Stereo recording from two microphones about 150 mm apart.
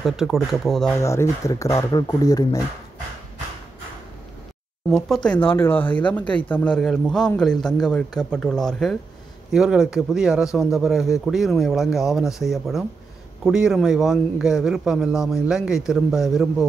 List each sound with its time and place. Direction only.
0.0 s a man's voice: centre (ahead or behind)
1.0 s speech: 20° left (ahead or behind)
4.9 s a man's voice: 5° left (ahead or behind)